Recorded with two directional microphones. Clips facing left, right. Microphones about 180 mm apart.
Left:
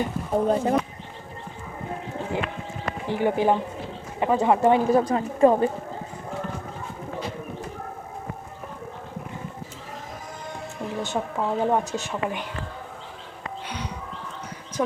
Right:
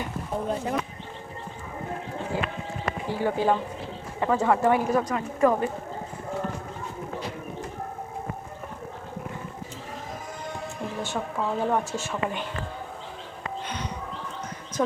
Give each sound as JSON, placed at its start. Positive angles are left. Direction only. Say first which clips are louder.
{"t": 0.0, "sound": "speech", "louder": "left 7 dB", "side_deg": 35}
{"t": 3.1, "sound": "speech", "louder": "left 3 dB", "side_deg": 20}
{"t": 11.0, "sound": "speech", "louder": "left 2 dB", "side_deg": 20}
{"t": 13.7, "sound": "music", "louder": "left 2 dB", "side_deg": 10}